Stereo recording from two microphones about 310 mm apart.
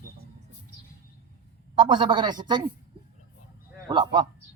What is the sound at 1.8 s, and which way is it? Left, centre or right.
Speech, centre.